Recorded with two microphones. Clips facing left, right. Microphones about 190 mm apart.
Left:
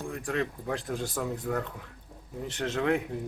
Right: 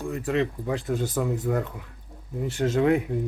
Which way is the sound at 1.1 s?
10° right (ahead or behind).